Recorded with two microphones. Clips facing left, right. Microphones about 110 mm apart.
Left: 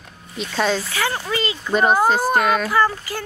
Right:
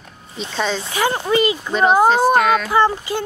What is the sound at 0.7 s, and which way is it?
Speech, 25° right (ahead or behind).